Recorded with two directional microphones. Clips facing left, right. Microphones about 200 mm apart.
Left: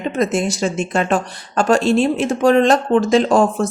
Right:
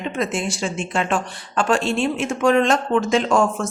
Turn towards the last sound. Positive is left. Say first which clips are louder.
# left 4 dB
turn(degrees=35)  # may be behind; listen again after turning